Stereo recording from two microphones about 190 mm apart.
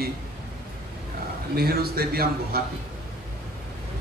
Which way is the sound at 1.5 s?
55° right (ahead or behind).